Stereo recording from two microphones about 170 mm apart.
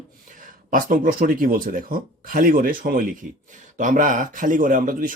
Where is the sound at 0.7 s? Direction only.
55° right (ahead or behind).